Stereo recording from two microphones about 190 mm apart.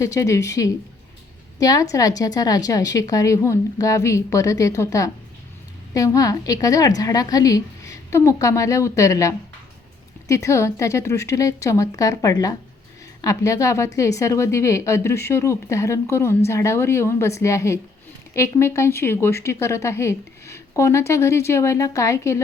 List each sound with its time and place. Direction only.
0.0 s a woman's voice: 15° left (ahead or behind)